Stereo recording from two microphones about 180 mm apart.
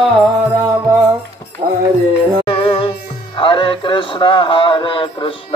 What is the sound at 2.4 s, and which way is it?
Music, 30° left (ahead or behind).